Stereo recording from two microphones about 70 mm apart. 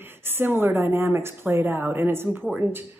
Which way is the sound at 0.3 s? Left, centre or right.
Right.